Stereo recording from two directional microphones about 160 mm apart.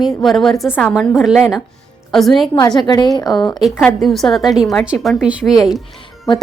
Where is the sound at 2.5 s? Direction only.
25° left (ahead or behind).